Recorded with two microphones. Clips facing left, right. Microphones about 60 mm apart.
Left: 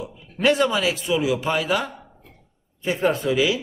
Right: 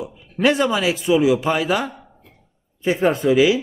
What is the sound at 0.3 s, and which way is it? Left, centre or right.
Speech, centre.